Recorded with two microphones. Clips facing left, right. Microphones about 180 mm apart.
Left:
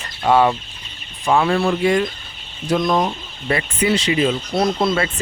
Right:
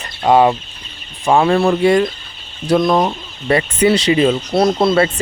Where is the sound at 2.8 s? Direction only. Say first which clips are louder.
Right 3 dB; 70° right (ahead or behind).